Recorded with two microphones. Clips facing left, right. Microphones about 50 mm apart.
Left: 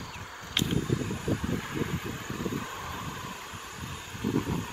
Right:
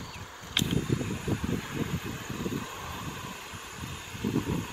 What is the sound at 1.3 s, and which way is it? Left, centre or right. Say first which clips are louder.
Vehicle: left 1 dB; left.